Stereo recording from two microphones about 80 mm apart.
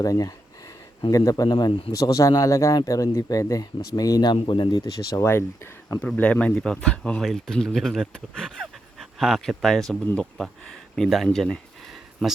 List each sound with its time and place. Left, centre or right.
0.0 s speech: left
1.5 s speech: left
2.0 s speech: left
4.8 s speech: left
5.2 s speech: left
6.1 s speech: centre